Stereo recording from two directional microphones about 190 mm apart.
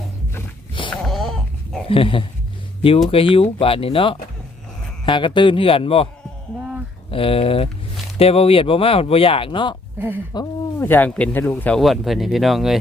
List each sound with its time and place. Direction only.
0.9 s dog: centre (ahead or behind)
1.9 s speech: 30° left (ahead or behind)
7.1 s speech: 30° left (ahead or behind)
10.3 s speech: 10° left (ahead or behind)